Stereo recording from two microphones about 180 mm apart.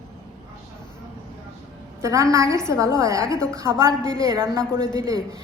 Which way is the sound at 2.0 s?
15° right (ahead or behind).